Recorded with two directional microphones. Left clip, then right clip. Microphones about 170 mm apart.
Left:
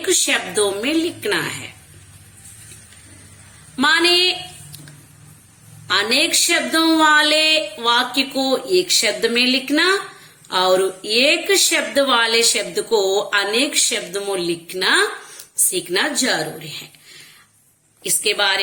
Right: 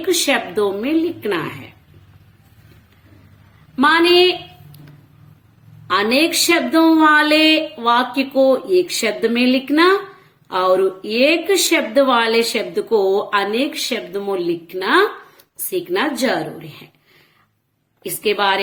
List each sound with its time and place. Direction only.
0.1 s a woman's voice: 50° right (ahead or behind)
3.8 s a woman's voice: 50° right (ahead or behind)
5.9 s a woman's voice: 55° right (ahead or behind)
18.0 s a woman's voice: 55° right (ahead or behind)